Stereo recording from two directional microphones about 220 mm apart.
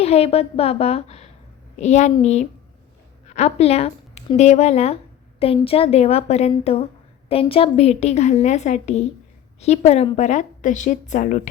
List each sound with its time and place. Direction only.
0.0 s a woman's voice: 30° left (ahead or behind)